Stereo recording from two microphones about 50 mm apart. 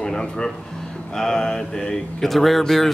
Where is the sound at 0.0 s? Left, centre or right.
Centre.